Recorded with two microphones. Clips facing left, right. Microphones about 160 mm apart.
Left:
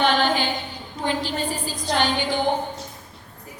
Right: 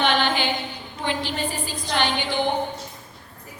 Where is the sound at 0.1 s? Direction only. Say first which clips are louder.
Left 1 dB; 40° left (ahead or behind).